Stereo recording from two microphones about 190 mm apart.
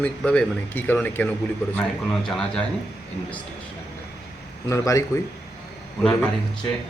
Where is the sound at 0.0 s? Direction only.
5° left (ahead or behind).